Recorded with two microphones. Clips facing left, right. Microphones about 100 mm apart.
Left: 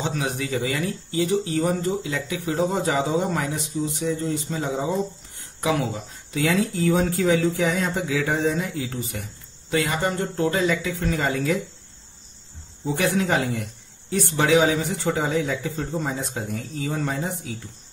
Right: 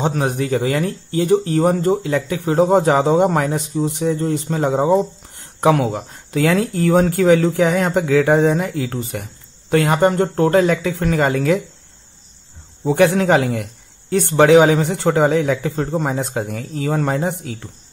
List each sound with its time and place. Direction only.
0.0 s speech: 50° right (ahead or behind)
12.8 s speech: 65° right (ahead or behind)
14.1 s speech: 60° right (ahead or behind)